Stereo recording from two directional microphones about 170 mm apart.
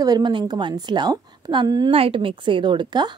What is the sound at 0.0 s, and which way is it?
A woman's voice, 25° right (ahead or behind).